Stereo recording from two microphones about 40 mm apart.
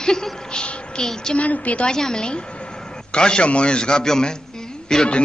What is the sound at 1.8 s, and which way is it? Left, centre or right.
A woman's voice, centre.